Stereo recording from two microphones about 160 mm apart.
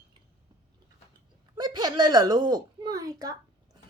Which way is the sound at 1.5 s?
25° right (ahead or behind).